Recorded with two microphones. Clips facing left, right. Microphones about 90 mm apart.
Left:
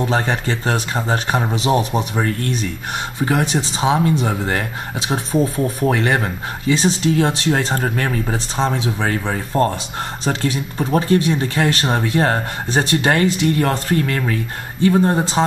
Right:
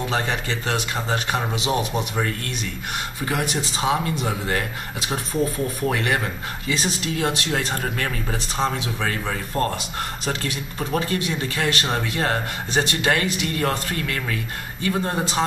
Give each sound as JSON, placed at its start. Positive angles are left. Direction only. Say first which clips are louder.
{"t": 0.0, "sound": "speech", "louder": "left 5 dB", "side_deg": 30}